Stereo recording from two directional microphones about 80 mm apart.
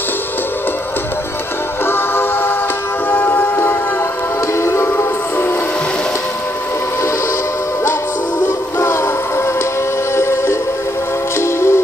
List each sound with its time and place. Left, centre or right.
1.9 s music: left
8.5 s music: left
10.1 s music: left